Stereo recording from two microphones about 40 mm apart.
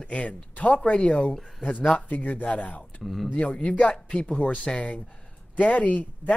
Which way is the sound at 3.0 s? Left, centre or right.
Centre.